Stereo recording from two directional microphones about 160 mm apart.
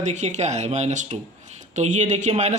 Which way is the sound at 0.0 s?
45° right (ahead or behind).